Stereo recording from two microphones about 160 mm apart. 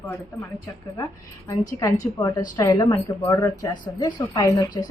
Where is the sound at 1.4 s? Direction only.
20° left (ahead or behind).